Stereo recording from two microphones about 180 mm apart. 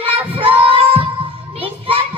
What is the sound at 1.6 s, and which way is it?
Children playing, 30° right (ahead or behind).